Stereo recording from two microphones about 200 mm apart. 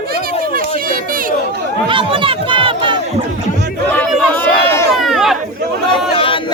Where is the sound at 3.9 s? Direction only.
10° left (ahead or behind).